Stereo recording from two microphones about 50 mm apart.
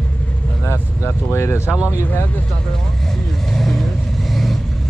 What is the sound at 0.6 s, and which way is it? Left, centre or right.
Vehicle, left.